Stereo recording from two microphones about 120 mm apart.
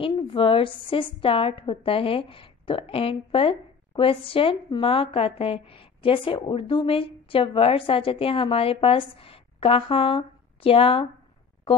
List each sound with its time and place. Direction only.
0.1 s a woman's voice: 45° left (ahead or behind)